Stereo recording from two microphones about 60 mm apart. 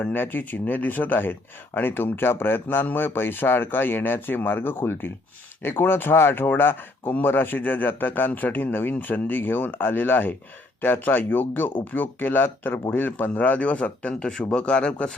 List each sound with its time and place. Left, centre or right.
0.0 s speech: left